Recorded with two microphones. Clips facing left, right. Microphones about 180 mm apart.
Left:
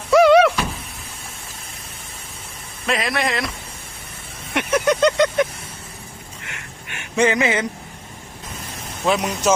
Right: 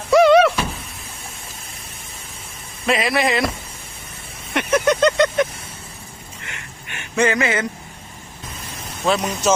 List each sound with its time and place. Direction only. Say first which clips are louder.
0.2 s a sound: even; 10° left (ahead or behind)
2.8 s speech: right 3 dB; centre (ahead or behind)
4.5 s vehicle: right 1 dB; 10° left (ahead or behind)
7.2 s speech: left 1 dB; 20° left (ahead or behind)
9.0 s speech: even; 10° left (ahead or behind)